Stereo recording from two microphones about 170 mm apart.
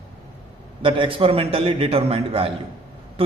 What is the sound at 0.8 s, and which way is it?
A man's voice, 30° right (ahead or behind).